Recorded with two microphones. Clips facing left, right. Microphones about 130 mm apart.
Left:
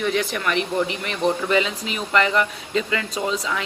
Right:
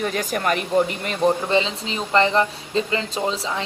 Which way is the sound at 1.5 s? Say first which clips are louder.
Even; 30° right (ahead or behind).